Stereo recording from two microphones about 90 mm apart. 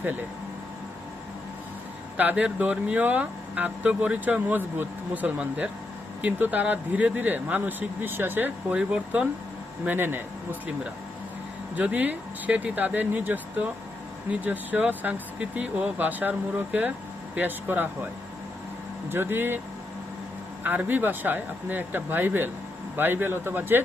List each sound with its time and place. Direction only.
2.1 s speech: 15° right (ahead or behind)
8.8 s speech: 10° right (ahead or behind)
9.8 s speech: 25° right (ahead or behind)
11.8 s speech: 15° right (ahead or behind)
20.7 s speech: 20° right (ahead or behind)